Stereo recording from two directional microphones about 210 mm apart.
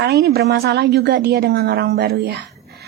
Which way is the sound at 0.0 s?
50° right (ahead or behind).